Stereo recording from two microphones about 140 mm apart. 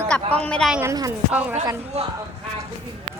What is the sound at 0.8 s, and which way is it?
Speech, 25° right (ahead or behind).